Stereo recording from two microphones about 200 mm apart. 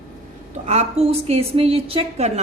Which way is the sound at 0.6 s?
35° right (ahead or behind).